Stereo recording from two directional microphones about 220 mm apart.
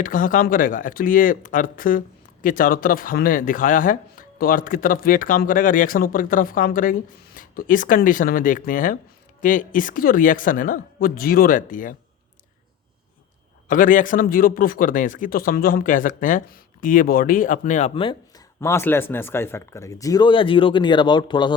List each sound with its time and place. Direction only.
0.0 s speech: 40° left (ahead or behind)
13.7 s speech: 35° left (ahead or behind); by 21.5 s 20° left (ahead or behind)